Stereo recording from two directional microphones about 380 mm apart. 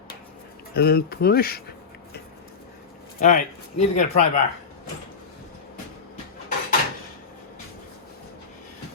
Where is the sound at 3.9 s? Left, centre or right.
Centre.